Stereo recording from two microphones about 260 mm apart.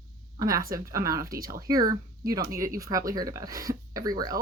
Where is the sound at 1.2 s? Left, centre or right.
Right.